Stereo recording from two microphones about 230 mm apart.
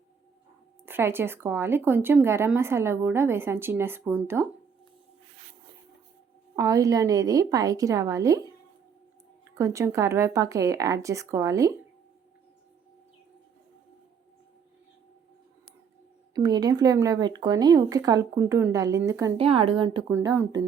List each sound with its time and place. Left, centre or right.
0.9 s speech: centre
6.6 s speech: centre
16.3 s speech: centre
19.4 s a woman's voice: right
20.0 s speech: centre